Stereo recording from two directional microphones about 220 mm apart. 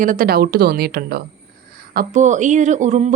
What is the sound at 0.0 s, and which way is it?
A woman's voice, 40° right (ahead or behind).